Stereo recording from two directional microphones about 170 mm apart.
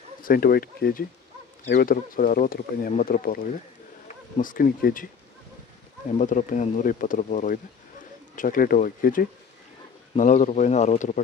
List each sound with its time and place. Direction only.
0.2 s speech: 60° left (ahead or behind)
6.1 s speech: 50° left (ahead or behind)